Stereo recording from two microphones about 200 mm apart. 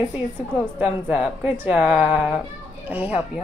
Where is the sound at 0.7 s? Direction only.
5° right (ahead or behind).